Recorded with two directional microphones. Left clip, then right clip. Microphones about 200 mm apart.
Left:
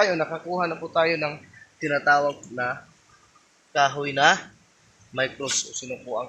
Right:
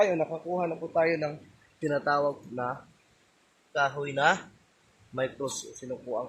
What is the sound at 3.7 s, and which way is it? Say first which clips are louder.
Speech: left 6 dB; 10° left (ahead or behind).